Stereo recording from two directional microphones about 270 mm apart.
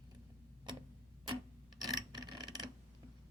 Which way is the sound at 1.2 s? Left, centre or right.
Centre.